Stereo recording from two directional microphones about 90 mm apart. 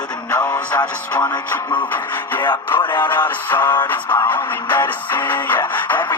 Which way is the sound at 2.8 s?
55° left (ahead or behind).